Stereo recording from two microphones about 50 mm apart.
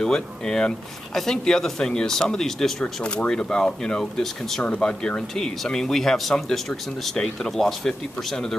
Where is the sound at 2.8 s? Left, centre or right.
Centre.